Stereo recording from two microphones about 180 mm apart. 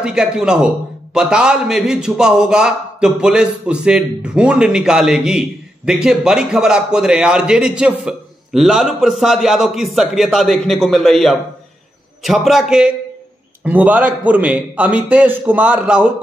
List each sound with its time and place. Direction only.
0.0 s a man's voice: 5° right (ahead or behind)